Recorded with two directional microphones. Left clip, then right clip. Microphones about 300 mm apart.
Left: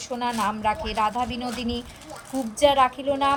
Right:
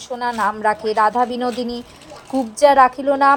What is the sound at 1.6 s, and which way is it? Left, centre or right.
Speech, centre.